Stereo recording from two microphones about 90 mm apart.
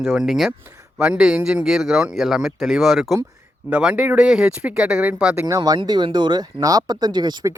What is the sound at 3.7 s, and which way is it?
Speech, 15° right (ahead or behind).